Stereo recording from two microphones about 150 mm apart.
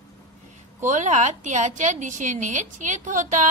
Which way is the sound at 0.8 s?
55° right (ahead or behind).